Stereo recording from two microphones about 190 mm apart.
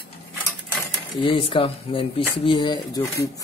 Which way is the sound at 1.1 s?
30° left (ahead or behind).